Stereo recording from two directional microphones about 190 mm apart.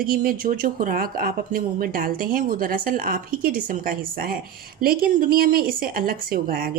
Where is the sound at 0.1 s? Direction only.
50° right (ahead or behind).